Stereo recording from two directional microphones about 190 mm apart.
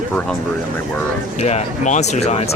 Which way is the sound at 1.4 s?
35° left (ahead or behind).